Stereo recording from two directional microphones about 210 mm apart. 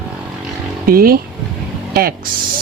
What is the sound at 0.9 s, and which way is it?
Speech, 45° right (ahead or behind).